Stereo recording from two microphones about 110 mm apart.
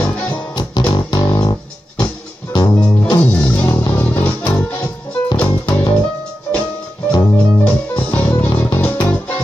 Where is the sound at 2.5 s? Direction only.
40° left (ahead or behind).